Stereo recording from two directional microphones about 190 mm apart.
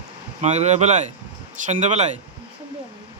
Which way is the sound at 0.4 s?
35° right (ahead or behind).